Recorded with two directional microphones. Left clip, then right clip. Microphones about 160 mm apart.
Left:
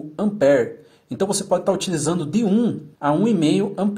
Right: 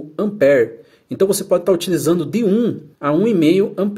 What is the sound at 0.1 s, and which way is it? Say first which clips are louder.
Speech: right 3 dB; 50° right (ahead or behind).